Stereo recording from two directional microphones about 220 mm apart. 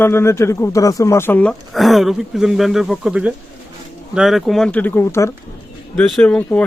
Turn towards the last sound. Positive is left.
turn(degrees=5)  # may be behind; listen again after turning